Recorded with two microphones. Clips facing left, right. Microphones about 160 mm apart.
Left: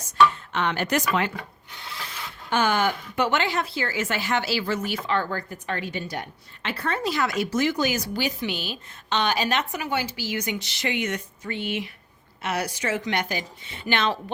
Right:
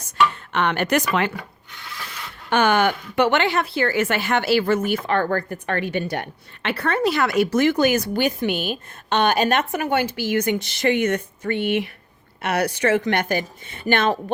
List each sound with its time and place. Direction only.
0.5 s a woman's voice: 60° right (ahead or behind)
2.5 s a woman's voice: 65° right (ahead or behind)